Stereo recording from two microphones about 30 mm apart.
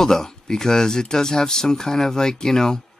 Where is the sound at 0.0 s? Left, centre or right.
Centre.